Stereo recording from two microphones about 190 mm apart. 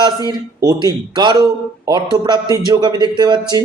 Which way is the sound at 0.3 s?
20° right (ahead or behind).